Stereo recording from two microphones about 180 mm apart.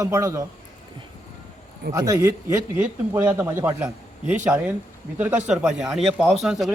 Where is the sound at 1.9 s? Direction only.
15° right (ahead or behind).